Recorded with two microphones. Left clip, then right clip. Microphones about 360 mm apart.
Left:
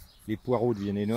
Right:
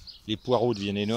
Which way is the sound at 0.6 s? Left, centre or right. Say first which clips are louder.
Right 2 dB; centre.